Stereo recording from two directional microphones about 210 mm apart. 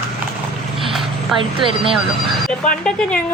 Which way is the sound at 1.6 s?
25° right (ahead or behind).